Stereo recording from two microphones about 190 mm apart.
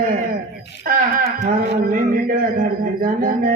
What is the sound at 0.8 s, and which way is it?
A man's voice, 45° right (ahead or behind).